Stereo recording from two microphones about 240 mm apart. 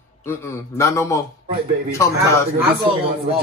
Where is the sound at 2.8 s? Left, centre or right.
Right.